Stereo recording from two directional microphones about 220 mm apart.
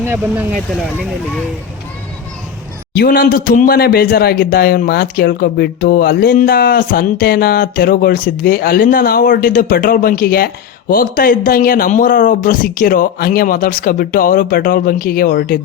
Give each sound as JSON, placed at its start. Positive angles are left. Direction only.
{"t": 0.0, "sound": "speech", "side_deg": -10}
{"t": 3.0, "sound": "speech", "side_deg": 40}